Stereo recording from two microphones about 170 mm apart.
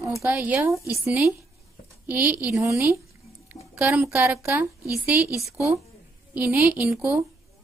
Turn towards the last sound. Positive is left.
turn(degrees=-5)  # may be behind; listen again after turning